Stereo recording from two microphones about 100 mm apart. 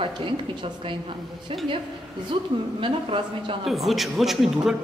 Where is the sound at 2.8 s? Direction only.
60° right (ahead or behind).